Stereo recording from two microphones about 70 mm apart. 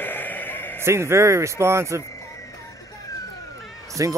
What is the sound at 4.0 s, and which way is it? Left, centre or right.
Speech, right.